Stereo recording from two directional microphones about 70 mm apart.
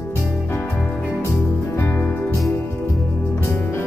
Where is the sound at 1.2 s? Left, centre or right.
Left.